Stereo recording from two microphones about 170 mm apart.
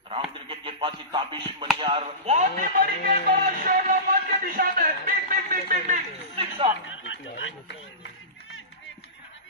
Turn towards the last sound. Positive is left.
turn(degrees=90)